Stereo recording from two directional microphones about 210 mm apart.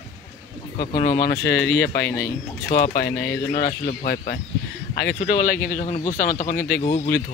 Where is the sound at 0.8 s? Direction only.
40° left (ahead or behind).